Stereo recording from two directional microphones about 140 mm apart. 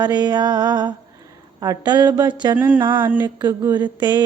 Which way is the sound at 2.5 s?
15° right (ahead or behind).